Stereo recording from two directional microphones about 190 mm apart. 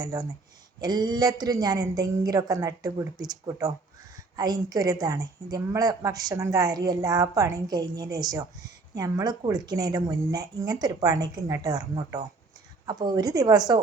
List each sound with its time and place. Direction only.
0.0 s a woman's voice: 20° right (ahead or behind)